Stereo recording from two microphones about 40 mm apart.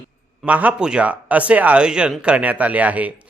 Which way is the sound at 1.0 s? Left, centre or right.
Right.